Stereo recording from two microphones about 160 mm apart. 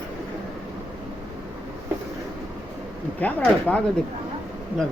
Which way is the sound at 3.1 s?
10° left (ahead or behind).